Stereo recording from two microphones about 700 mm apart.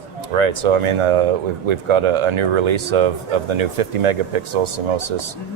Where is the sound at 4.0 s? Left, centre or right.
Right.